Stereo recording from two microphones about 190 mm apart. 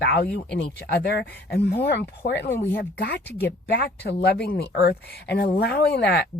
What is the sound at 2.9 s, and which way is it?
A woman's voice, 60° left (ahead or behind).